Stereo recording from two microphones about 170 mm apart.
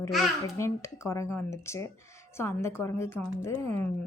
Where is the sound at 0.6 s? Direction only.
15° left (ahead or behind).